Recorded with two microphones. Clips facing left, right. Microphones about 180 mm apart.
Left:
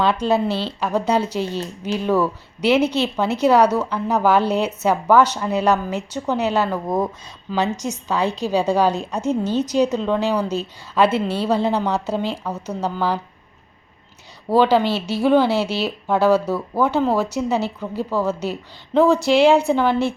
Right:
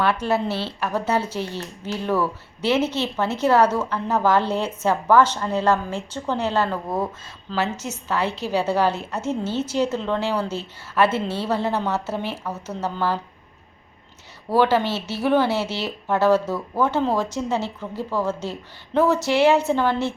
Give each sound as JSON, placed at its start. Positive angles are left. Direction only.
{"t": 0.0, "sound": "a woman's voice", "side_deg": 15}
{"t": 14.5, "sound": "a woman's voice", "side_deg": 15}